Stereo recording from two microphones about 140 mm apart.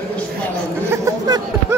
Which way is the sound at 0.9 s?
25° right (ahead or behind).